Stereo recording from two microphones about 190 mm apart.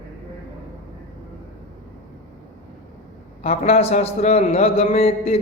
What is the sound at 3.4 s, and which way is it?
A man's voice, 30° left (ahead or behind).